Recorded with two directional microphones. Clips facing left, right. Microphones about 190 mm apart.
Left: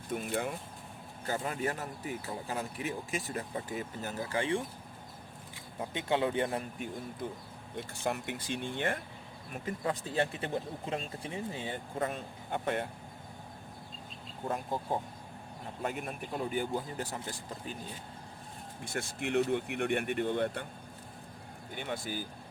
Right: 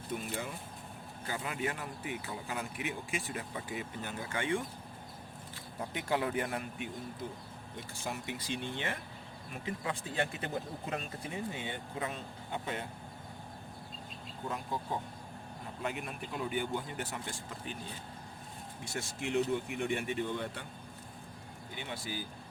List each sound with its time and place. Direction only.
0.1 s speech: 50° left (ahead or behind)
1.3 s speech: 40° left (ahead or behind)
8.0 s speech: 60° left (ahead or behind)
15.8 s speech: 45° left (ahead or behind)
18.9 s speech: 55° left (ahead or behind)
21.8 s speech: 50° left (ahead or behind)